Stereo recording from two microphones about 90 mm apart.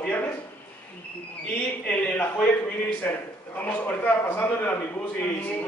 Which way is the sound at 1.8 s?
15° left (ahead or behind).